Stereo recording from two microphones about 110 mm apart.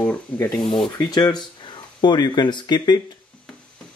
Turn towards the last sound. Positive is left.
turn(degrees=40)  # may be behind; listen again after turning